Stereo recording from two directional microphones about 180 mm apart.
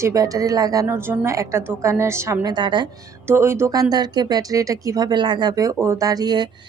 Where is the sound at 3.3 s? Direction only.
15° right (ahead or behind).